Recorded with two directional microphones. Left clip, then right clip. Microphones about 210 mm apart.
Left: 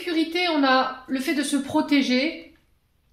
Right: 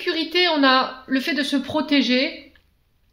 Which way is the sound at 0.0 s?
45° right (ahead or behind).